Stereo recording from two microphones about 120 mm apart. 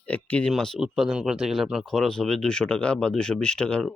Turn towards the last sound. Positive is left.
turn(degrees=5)  # may be behind; listen again after turning